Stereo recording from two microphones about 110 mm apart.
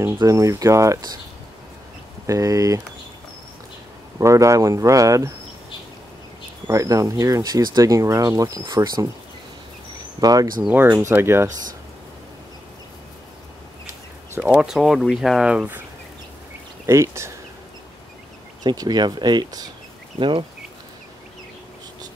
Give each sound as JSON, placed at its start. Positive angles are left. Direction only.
{"t": 0.2, "sound": "speech", "side_deg": -30}
{"t": 2.2, "sound": "speech", "side_deg": -30}
{"t": 4.2, "sound": "speech", "side_deg": -25}
{"t": 6.7, "sound": "speech", "side_deg": -30}
{"t": 10.2, "sound": "speech", "side_deg": -35}
{"t": 10.7, "sound": "speech", "side_deg": -20}
{"t": 14.5, "sound": "speech", "side_deg": -5}
{"t": 16.8, "sound": "speech", "side_deg": -25}
{"t": 18.6, "sound": "speech", "side_deg": -40}
{"t": 20.2, "sound": "speech", "side_deg": -50}